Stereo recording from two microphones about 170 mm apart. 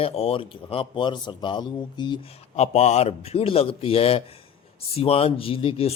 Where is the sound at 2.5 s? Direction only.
40° left (ahead or behind).